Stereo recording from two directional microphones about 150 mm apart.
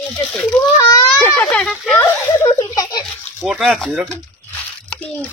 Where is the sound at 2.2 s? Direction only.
20° left (ahead or behind).